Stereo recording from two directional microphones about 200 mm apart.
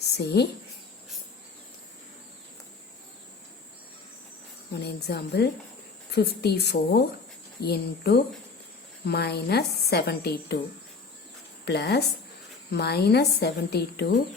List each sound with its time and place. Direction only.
0.2 s speech: 55° left (ahead or behind)
4.7 s a woman's voice: 55° left (ahead or behind)
11.6 s speech: 55° left (ahead or behind)